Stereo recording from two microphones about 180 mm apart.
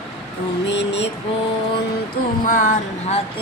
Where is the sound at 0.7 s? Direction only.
80° left.